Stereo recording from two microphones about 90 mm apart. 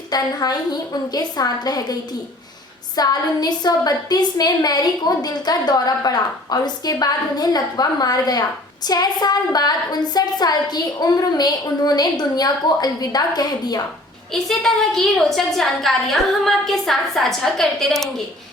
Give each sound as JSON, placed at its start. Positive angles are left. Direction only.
{"t": 0.1, "sound": "a woman's voice", "side_deg": 45}
{"t": 14.3, "sound": "a woman's voice", "side_deg": 5}